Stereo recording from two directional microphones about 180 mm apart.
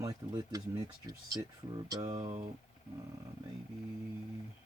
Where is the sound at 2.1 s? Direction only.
35° right (ahead or behind).